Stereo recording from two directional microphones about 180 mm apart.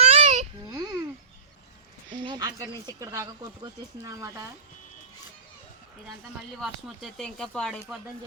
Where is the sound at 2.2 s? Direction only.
20° right (ahead or behind).